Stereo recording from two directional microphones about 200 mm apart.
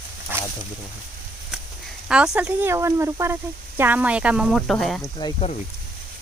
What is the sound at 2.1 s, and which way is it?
Speech, 5° right (ahead or behind).